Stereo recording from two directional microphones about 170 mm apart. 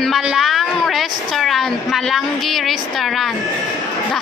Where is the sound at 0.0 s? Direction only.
Centre (ahead or behind).